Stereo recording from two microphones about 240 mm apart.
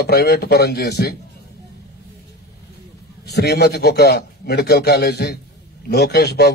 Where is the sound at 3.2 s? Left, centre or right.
Left.